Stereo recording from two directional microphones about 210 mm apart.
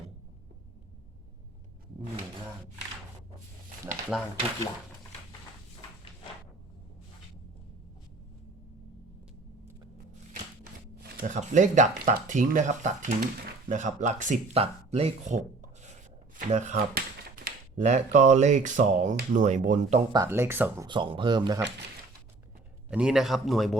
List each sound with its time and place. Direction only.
4.1 s speech: 5° right (ahead or behind)
11.2 s speech: 35° right (ahead or behind)
20.1 s speech: 10° right (ahead or behind)
20.8 s speech: 25° right (ahead or behind)
22.9 s speech: 5° right (ahead or behind)